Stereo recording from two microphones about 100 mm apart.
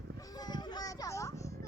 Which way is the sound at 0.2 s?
40° left (ahead or behind).